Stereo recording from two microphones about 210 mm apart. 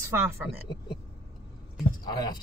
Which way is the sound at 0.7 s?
20° left (ahead or behind).